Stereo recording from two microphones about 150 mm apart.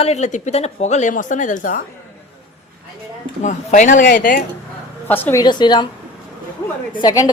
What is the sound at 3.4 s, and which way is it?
Speech, 55° left (ahead or behind).